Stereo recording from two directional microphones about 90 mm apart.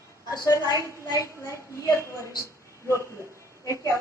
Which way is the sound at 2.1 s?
35° right (ahead or behind).